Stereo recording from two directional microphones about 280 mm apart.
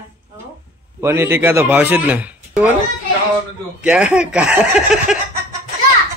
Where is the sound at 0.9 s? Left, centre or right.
Centre.